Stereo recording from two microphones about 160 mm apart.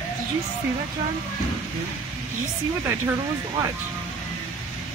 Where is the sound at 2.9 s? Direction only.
15° right (ahead or behind).